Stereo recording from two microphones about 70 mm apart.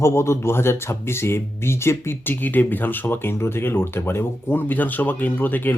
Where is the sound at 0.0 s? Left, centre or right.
Left.